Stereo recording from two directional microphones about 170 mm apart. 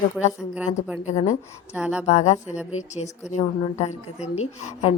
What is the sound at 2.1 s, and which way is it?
A woman's voice, 40° left (ahead or behind).